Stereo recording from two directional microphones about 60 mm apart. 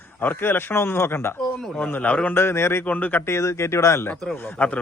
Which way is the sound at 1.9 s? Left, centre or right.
Left.